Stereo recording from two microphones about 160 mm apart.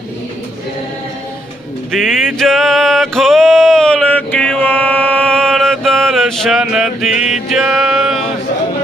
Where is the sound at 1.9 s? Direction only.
Centre (ahead or behind).